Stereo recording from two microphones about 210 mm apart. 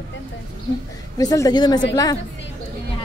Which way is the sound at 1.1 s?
15° left (ahead or behind).